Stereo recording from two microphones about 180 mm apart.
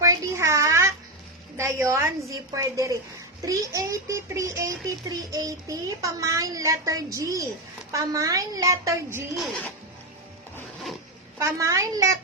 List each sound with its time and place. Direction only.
0.0 s a sound: 15° right (ahead or behind)
1.5 s a woman's voice: 15° right (ahead or behind)
9.3 s speech: centre (ahead or behind)
11.3 s speech: 15° right (ahead or behind)